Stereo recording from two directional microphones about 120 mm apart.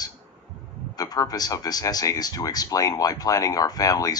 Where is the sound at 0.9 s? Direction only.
30° left (ahead or behind).